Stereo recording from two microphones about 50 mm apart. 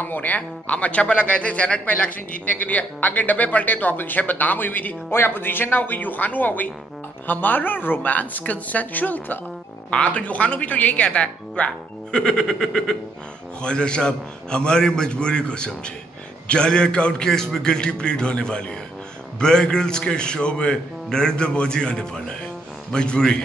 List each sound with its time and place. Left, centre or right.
0.0 s speech: left
9.8 s a man's voice: left